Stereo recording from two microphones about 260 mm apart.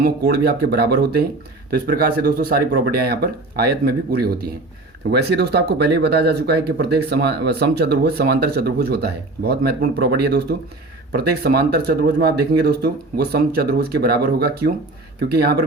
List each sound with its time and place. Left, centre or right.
0.0 s speech: right